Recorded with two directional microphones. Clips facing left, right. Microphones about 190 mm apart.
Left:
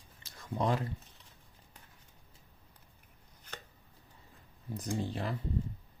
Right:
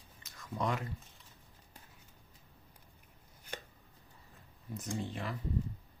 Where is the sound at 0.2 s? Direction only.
30° left (ahead or behind).